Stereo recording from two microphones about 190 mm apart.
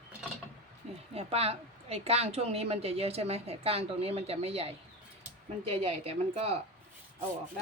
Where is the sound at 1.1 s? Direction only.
30° right (ahead or behind).